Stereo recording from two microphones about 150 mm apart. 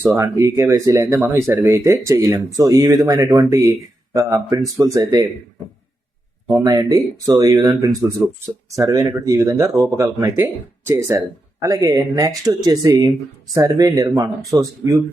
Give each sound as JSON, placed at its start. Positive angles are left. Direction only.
{"t": 0.1, "sound": "speech", "side_deg": -25}
{"t": 6.5, "sound": "speech", "side_deg": -25}
{"t": 8.2, "sound": "speech", "side_deg": -5}
{"t": 8.7, "sound": "speech", "side_deg": -20}